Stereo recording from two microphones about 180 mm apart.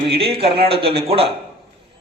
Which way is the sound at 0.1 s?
30° right (ahead or behind).